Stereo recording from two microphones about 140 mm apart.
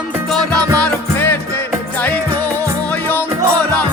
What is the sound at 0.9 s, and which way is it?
Music, 15° left (ahead or behind).